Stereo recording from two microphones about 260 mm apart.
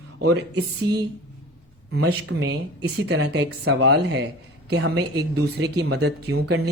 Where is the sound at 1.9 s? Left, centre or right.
Right.